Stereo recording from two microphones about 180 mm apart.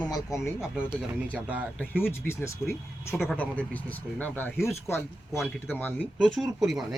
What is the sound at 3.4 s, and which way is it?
Speech, 10° left (ahead or behind).